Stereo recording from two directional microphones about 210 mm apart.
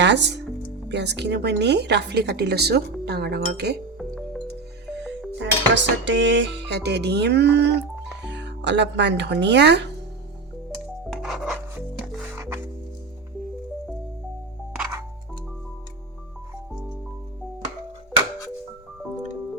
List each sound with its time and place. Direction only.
0.0 s a woman's voice: 55° right (ahead or behind)
3.9 s music: centre (ahead or behind)
5.4 s dishes: 60° right (ahead or behind)
11.1 s music: centre (ahead or behind)